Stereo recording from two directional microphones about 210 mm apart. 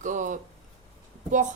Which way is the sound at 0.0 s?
35° right (ahead or behind).